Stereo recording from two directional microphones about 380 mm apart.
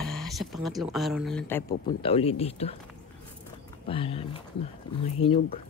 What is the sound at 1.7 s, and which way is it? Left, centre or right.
Speech, centre.